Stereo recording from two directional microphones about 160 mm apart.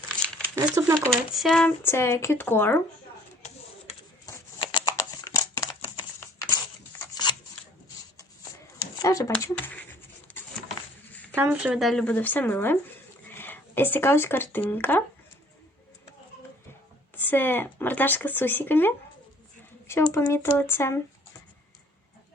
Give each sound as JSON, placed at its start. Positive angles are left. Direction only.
{"t": 0.5, "sound": "speech", "side_deg": -20}
{"t": 1.3, "sound": "speech", "side_deg": 0}
{"t": 1.8, "sound": "speech", "side_deg": 15}
{"t": 4.7, "sound": "a sound", "side_deg": 25}
{"t": 7.2, "sound": "scissors", "side_deg": 25}
{"t": 9.0, "sound": "writing", "side_deg": 20}
{"t": 11.1, "sound": "a sound", "side_deg": 10}
{"t": 11.3, "sound": "speech", "side_deg": -10}
{"t": 17.2, "sound": "speech", "side_deg": 10}
{"t": 20.1, "sound": "speech", "side_deg": 20}